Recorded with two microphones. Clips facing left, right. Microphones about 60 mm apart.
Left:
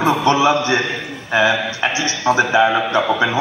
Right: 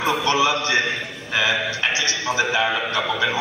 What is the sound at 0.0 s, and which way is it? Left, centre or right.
A man's voice, left.